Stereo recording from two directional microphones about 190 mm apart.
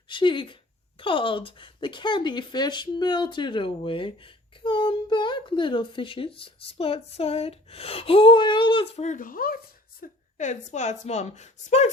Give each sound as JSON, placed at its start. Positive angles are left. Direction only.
{"t": 0.1, "sound": "a woman's voice", "side_deg": 25}